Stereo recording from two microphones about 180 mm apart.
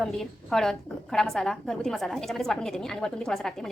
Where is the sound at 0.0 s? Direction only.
Centre (ahead or behind).